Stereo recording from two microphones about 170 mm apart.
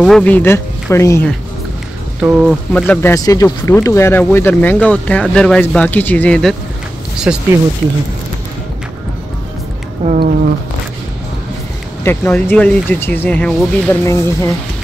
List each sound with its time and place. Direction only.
0.0 s speech: 5° left (ahead or behind)
2.2 s speech: 5° right (ahead or behind)
2.7 s speech: 10° left (ahead or behind)
7.3 s speech: 5° right (ahead or behind)
10.0 s speech: 55° right (ahead or behind)
12.0 s speech: 10° left (ahead or behind)